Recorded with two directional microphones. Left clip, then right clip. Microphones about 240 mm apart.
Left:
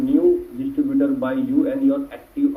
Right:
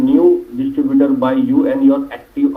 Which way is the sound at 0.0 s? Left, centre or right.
Right.